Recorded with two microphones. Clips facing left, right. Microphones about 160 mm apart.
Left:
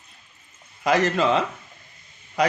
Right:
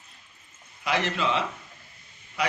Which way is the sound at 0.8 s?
45° left (ahead or behind).